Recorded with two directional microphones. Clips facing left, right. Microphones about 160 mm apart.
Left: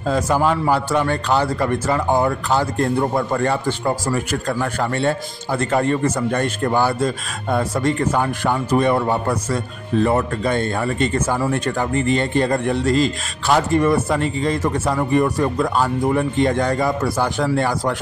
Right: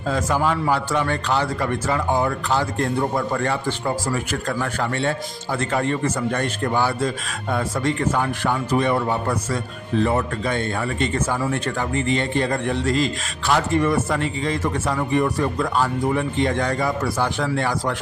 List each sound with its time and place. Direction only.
0.1 s speech: 40° left (ahead or behind)
4.1 s speech: 40° left (ahead or behind)